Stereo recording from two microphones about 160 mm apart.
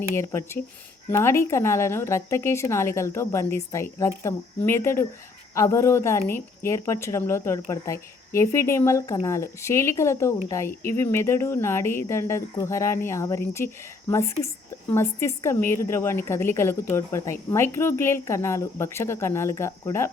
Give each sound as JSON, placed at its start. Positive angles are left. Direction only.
{"t": 0.1, "sound": "speech", "side_deg": 15}